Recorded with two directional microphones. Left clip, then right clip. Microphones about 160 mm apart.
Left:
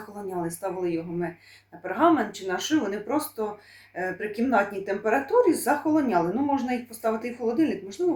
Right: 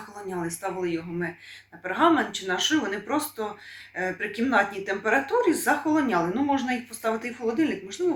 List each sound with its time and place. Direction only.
0.3 s speech: 20° left (ahead or behind)